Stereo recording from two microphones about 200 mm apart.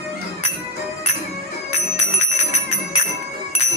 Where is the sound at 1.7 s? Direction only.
35° left (ahead or behind).